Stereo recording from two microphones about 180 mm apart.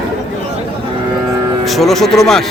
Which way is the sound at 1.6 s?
Centre (ahead or behind).